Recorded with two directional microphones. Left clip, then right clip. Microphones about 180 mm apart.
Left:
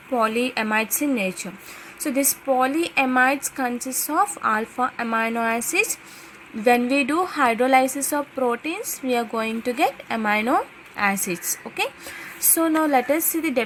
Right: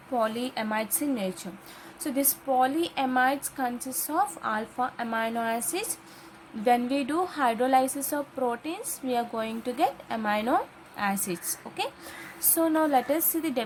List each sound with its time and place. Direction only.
0.1 s a woman's voice: 20° left (ahead or behind)
12.5 s speech: 15° left (ahead or behind)